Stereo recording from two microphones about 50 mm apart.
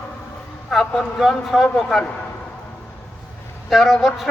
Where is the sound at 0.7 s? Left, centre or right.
Centre.